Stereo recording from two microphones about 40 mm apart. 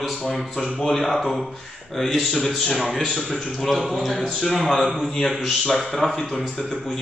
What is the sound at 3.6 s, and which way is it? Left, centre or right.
A man's voice, centre.